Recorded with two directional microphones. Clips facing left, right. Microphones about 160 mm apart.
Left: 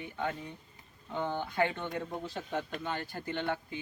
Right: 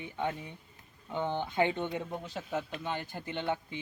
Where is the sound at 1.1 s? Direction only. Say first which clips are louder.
Right 2 dB; 20° right (ahead or behind).